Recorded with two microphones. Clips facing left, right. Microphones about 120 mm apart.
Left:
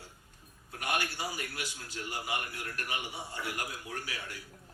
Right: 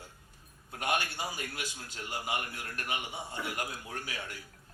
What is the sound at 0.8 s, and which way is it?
Speech, 25° right (ahead or behind).